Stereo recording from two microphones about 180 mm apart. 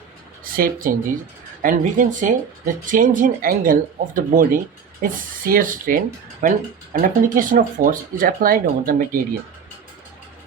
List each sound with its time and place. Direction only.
0.4 s speech: 50° right (ahead or behind)